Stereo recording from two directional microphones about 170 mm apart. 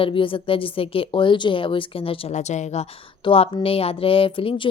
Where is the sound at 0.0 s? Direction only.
30° left (ahead or behind).